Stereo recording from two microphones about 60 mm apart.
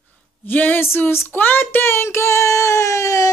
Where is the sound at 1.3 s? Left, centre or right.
Left.